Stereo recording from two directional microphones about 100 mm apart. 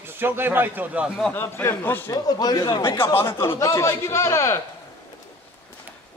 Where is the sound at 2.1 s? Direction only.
40° left (ahead or behind).